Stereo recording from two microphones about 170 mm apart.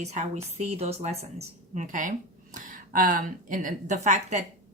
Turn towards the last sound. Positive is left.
turn(degrees=-45)  # may be behind; listen again after turning